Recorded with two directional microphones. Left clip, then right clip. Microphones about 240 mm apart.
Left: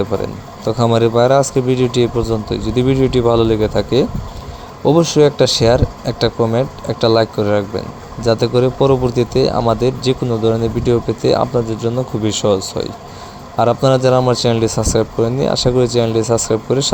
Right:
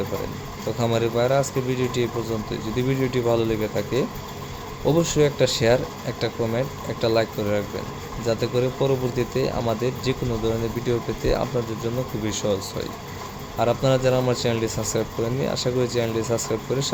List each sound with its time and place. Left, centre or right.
0.7 s speech: left